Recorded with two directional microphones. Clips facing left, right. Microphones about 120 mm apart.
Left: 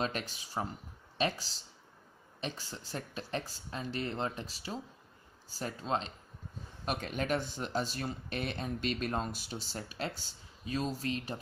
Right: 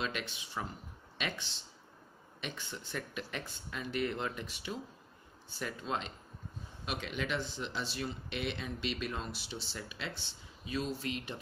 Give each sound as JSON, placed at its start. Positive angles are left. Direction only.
{"t": 0.0, "sound": "speech", "side_deg": 40}